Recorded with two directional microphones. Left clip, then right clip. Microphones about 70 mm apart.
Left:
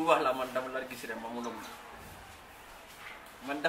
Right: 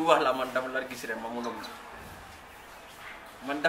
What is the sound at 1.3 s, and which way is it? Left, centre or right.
Speech, centre.